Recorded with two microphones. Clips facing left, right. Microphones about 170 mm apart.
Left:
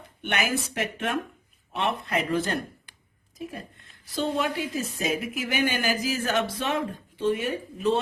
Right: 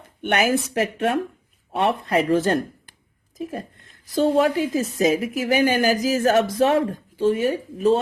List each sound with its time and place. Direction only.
0.2 s a woman's voice: 40° right (ahead or behind)
4.1 s a woman's voice: 45° right (ahead or behind)